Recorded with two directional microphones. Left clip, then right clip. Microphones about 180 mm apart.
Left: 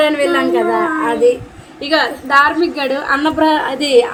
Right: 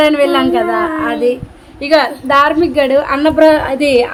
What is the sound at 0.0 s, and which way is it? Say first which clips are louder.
A woman's voice: right 3 dB; 55° right (ahead or behind).